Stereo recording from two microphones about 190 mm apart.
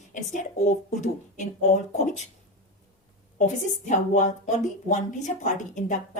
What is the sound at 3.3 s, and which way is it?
A woman's voice, 40° left (ahead or behind).